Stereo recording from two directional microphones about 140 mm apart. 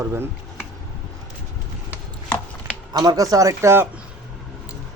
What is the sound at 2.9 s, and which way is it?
Speech, 25° right (ahead or behind).